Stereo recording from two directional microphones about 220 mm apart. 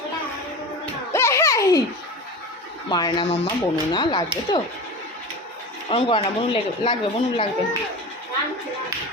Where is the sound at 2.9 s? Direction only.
20° left (ahead or behind).